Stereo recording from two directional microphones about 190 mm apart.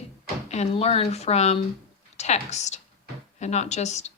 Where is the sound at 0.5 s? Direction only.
35° left (ahead or behind).